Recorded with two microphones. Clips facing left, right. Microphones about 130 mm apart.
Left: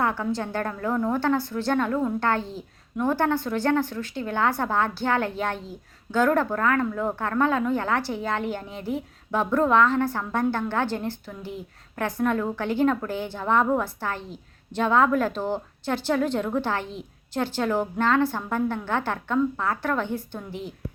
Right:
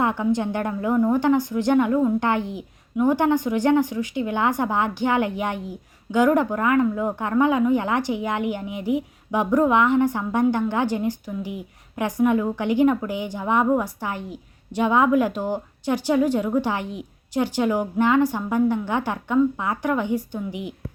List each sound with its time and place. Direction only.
0.0 s a woman's voice: 15° right (ahead or behind)